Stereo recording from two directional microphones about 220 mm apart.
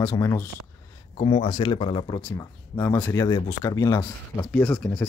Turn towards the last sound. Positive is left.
turn(degrees=5)  # may be behind; listen again after turning